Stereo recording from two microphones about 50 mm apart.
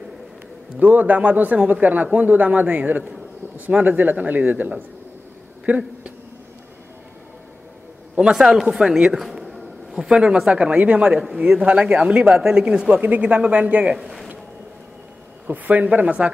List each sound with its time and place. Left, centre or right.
0.7 s speech: right
8.2 s speech: centre
9.2 s a sound: centre
10.0 s speech: centre
10.3 s speech: centre
10.6 s speech: right
13.9 s speech: centre
15.4 s speech: right